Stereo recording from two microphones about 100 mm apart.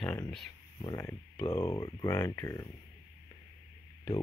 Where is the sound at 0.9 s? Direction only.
25° left (ahead or behind).